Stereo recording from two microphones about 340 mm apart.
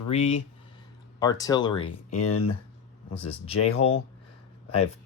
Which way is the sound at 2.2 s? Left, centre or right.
Left.